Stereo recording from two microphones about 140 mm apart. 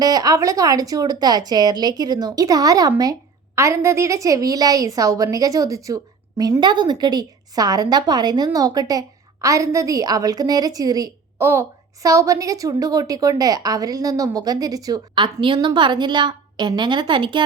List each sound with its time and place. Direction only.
0.0 s a woman's voice: 25° right (ahead or behind)